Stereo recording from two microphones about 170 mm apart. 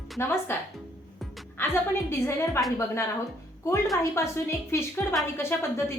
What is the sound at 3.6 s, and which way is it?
Speech, 15° left (ahead or behind).